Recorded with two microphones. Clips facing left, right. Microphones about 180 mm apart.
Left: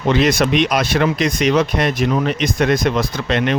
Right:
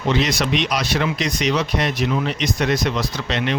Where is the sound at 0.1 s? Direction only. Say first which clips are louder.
Left 5 dB; 55° left (ahead or behind).